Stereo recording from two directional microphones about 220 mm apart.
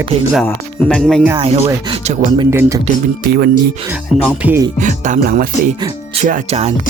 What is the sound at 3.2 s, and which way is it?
Speech, 45° right (ahead or behind).